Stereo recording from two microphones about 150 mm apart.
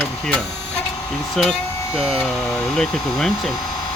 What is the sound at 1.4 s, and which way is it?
Speech, centre (ahead or behind).